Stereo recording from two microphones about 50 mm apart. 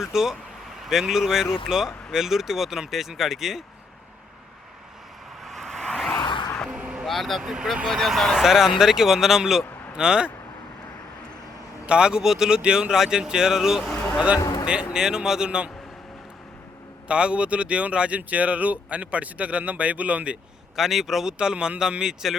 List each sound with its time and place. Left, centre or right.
0.0 s speech: centre
5.5 s vehicle: centre
6.7 s a sound: centre
7.0 s speech: centre
7.5 s speech: centre
7.9 s speech: centre
11.9 s speech: centre
17.1 s speech: right
20.7 s speech: centre